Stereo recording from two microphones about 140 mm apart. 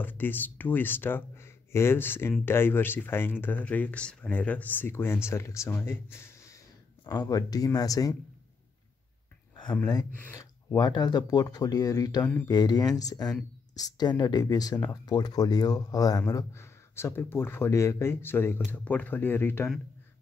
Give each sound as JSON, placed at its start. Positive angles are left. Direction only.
{"t": 0.0, "sound": "speech", "side_deg": 15}
{"t": 7.1, "sound": "speech", "side_deg": 25}
{"t": 10.2, "sound": "a sound", "side_deg": 15}
{"t": 10.8, "sound": "speech", "side_deg": 30}